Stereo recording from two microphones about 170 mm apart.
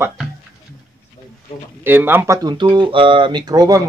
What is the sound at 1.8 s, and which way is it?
A man's voice, 10° right (ahead or behind).